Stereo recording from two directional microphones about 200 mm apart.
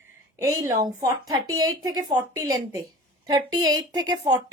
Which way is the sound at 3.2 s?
20° right (ahead or behind).